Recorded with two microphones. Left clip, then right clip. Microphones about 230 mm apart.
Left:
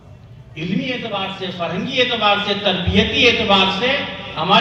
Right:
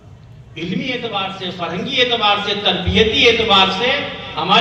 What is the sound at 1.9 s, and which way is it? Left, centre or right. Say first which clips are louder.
Speech: right 1 dB; right.